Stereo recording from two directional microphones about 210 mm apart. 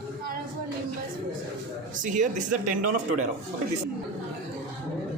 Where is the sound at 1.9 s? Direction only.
35° right (ahead or behind).